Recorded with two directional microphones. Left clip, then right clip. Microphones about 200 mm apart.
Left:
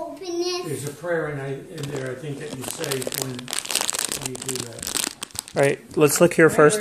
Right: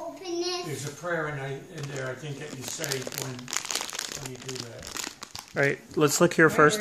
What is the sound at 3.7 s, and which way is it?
Crumpling, 20° left (ahead or behind).